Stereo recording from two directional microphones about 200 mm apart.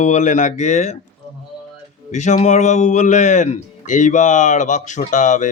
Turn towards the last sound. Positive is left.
turn(degrees=40)  # may be behind; listen again after turning